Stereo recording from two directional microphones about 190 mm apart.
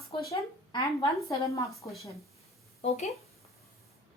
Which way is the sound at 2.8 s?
35° left (ahead or behind).